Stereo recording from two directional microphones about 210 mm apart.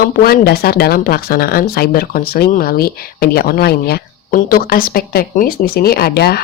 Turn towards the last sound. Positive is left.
turn(degrees=45)  # may be behind; listen again after turning